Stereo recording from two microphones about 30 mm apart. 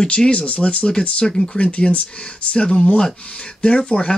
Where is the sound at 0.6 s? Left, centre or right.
Left.